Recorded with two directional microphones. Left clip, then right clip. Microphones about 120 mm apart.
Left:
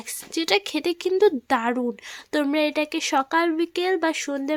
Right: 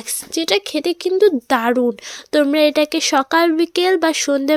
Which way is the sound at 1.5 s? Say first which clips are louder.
Right 7 dB; 25° right (ahead or behind).